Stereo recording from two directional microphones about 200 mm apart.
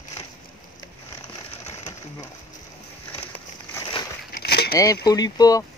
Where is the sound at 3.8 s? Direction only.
20° left (ahead or behind).